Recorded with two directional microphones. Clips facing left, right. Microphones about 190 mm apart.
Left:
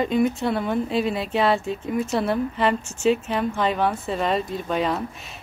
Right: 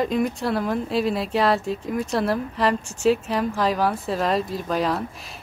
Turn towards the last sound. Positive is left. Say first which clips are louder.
# even
turn(degrees=0)  # may be behind; listen again after turning